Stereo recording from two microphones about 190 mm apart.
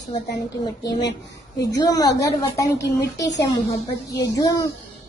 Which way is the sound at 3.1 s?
65° left (ahead or behind).